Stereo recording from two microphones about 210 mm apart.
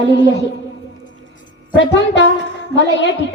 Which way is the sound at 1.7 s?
60° left (ahead or behind).